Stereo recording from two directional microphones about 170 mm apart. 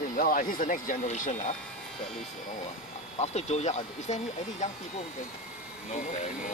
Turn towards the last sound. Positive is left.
turn(degrees=45)  # may be behind; listen again after turning